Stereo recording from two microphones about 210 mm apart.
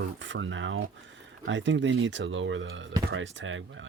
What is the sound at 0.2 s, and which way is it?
Speech, 65° right (ahead or behind).